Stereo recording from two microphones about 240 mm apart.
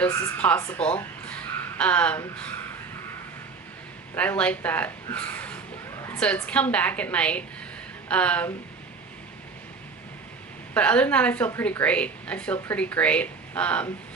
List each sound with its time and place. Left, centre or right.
0.0 s a woman's voice: centre
4.1 s a woman's voice: centre
10.8 s a woman's voice: centre